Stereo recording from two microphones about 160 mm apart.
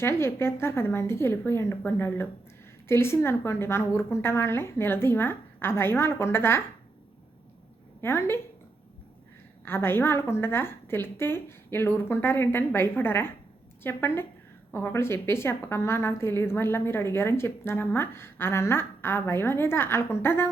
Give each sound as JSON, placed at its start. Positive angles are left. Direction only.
{"t": 0.0, "sound": "a woman's voice", "side_deg": 15}
{"t": 8.0, "sound": "a woman's voice", "side_deg": 15}
{"t": 9.6, "sound": "a woman's voice", "side_deg": 15}